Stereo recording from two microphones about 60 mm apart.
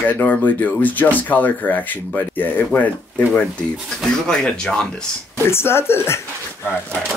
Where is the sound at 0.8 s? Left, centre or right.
Left.